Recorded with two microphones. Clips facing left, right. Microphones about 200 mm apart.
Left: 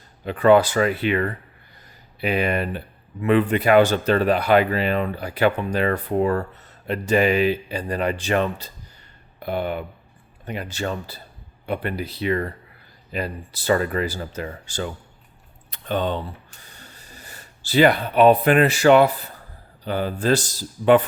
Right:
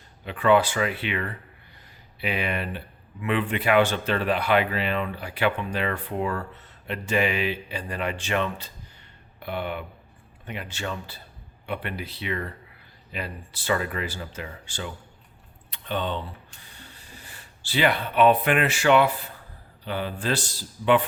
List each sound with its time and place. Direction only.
0.3 s speech: 40° left (ahead or behind)